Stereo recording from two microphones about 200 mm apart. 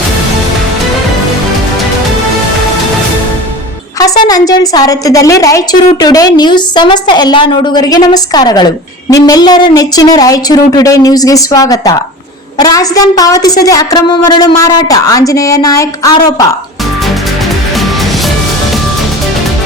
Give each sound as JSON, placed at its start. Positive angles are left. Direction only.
{"t": 4.2, "sound": "a woman's voice", "side_deg": 20}